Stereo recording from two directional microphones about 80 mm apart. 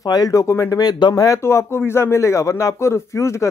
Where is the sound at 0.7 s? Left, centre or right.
Left.